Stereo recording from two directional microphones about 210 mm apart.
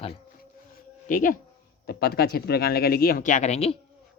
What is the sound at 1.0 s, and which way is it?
Speech, 40° left (ahead or behind).